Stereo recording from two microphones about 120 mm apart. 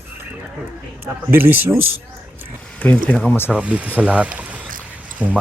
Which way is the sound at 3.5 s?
10° right (ahead or behind).